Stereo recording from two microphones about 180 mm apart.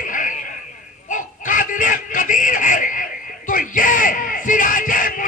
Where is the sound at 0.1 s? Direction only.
45° left (ahead or behind).